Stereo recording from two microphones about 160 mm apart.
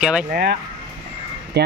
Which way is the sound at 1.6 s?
90° right.